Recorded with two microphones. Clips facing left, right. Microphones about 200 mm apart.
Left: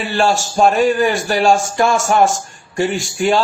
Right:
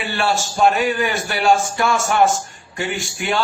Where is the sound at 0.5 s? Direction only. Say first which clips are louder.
Left 4 dB; 35° left (ahead or behind).